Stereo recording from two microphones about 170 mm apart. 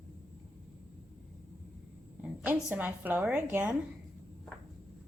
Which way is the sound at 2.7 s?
10° right (ahead or behind).